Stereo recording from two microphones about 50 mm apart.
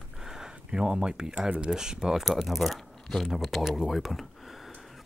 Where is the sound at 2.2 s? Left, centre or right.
Centre.